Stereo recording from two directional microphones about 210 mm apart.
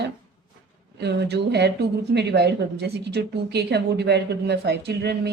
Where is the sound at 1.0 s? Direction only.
55° right (ahead or behind).